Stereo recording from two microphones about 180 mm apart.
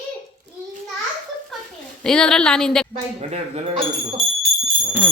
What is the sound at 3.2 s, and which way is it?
Speech, 35° right (ahead or behind).